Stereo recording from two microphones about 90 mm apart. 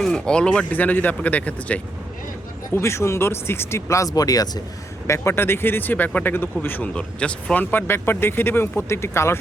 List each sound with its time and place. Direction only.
0.0 s speech: 10° left (ahead or behind)
2.7 s speech: 30° left (ahead or behind)
5.0 s speech: 30° left (ahead or behind)